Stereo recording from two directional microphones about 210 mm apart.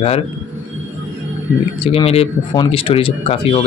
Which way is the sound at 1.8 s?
25° left (ahead or behind).